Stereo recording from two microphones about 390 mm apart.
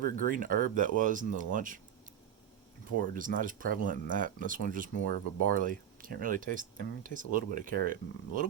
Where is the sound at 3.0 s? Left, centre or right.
Right.